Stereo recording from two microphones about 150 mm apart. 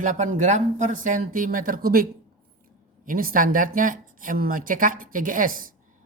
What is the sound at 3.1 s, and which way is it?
Speech, 70° right (ahead or behind).